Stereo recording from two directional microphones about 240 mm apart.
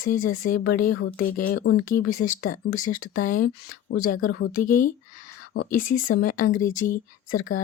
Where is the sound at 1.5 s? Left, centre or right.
Left.